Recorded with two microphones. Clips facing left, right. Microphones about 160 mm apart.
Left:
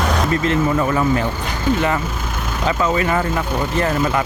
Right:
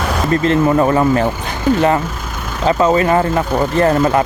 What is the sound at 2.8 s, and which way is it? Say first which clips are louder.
Speech: right 6 dB; 35° right (ahead or behind).